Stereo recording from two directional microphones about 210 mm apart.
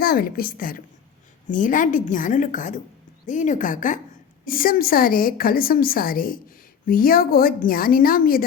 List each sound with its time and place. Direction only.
0.0 s a woman's voice: 45° left (ahead or behind)